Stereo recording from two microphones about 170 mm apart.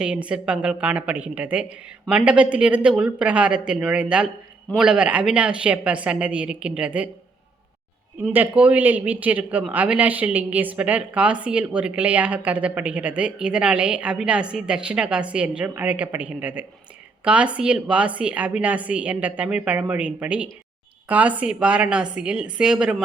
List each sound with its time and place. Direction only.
0.0 s speech: 5° right (ahead or behind)
8.3 s a woman's voice: 10° right (ahead or behind)